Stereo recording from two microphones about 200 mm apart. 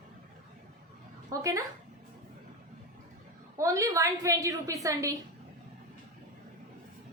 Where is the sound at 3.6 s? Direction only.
15° right (ahead or behind).